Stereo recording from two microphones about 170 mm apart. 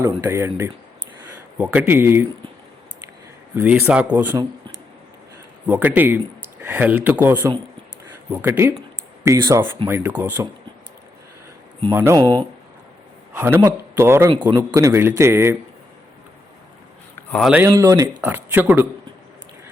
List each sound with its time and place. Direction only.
0.0 s speech: 15° right (ahead or behind)
3.5 s speech: 10° right (ahead or behind)
4.3 s a man's voice: 25° right (ahead or behind)
5.6 s speech: 10° right (ahead or behind)
11.9 s speech: 15° right (ahead or behind)
17.3 s speech: centre (ahead or behind)
17.6 s speech: 20° right (ahead or behind)